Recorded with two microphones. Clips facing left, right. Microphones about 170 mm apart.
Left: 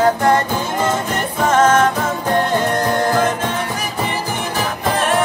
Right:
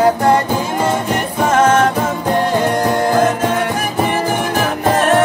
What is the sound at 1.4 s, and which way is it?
Music, 10° right (ahead or behind).